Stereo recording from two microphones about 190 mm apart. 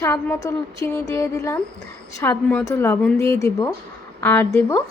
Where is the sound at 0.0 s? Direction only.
15° left (ahead or behind).